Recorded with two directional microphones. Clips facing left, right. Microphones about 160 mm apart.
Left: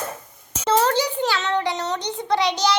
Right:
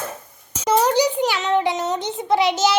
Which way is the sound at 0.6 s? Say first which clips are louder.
Right 2 dB; 10° right (ahead or behind).